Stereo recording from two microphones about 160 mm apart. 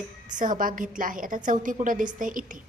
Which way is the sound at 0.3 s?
55° right (ahead or behind).